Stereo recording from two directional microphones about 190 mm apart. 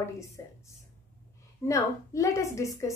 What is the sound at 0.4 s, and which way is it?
Speech, 15° left (ahead or behind).